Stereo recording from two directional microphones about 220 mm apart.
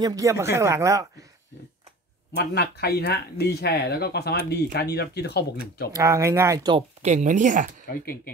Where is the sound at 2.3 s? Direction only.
45° left (ahead or behind).